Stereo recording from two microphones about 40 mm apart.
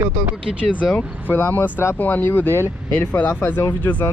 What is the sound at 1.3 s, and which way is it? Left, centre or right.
Speech, left.